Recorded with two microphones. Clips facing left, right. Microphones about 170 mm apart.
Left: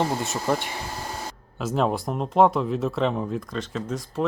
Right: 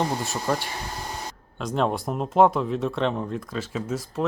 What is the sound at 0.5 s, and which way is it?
Speech, 20° left (ahead or behind).